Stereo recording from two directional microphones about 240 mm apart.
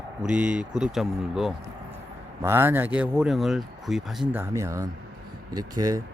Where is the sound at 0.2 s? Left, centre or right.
Centre.